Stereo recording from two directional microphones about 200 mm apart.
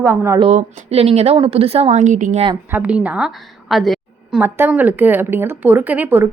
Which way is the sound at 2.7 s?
5° right (ahead or behind).